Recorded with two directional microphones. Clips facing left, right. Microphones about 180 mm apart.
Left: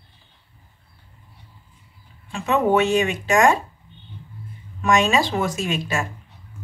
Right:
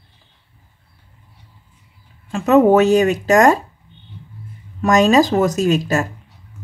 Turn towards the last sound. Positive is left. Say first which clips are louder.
# right 8 dB
turn(degrees=-40)  # may be behind; listen again after turning